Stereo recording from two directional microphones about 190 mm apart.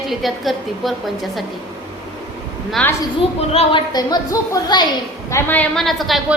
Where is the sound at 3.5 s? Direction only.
30° left (ahead or behind).